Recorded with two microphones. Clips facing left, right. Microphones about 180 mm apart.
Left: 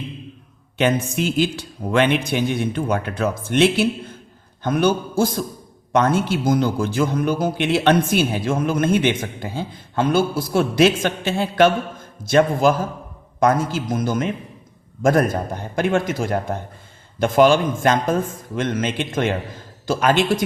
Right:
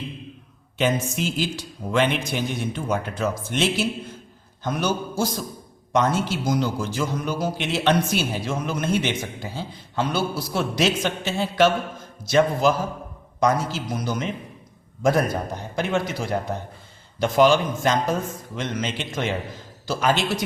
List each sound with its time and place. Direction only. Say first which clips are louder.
0.8 s a man's voice: left 3 dB; 60° left (ahead or behind)